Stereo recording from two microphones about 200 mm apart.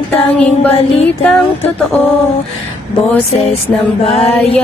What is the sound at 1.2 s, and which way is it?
Speech, 5° left (ahead or behind).